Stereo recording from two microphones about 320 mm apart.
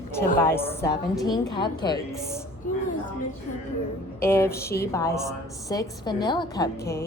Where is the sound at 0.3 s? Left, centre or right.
Centre.